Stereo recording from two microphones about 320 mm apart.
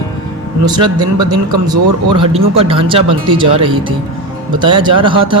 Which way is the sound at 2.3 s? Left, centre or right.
Centre.